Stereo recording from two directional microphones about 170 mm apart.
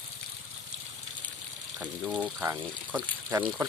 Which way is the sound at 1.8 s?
5° right (ahead or behind).